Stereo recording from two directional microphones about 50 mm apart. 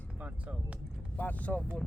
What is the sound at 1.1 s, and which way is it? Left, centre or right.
Speech, left.